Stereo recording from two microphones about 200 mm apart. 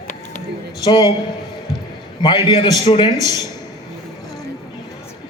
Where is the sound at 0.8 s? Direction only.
20° left (ahead or behind).